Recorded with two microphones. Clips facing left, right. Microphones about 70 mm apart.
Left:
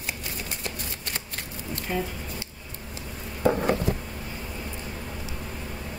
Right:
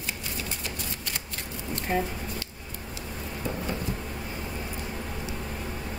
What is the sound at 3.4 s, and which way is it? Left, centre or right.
Patter, left.